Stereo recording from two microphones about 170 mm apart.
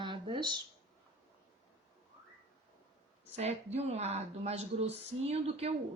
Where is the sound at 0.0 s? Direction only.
25° right (ahead or behind).